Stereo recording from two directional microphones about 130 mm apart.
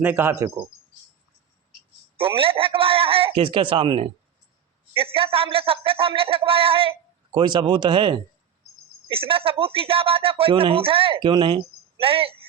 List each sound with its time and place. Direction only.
0.0 s speech: 15° right (ahead or behind)
2.1 s speech: 45° right (ahead or behind)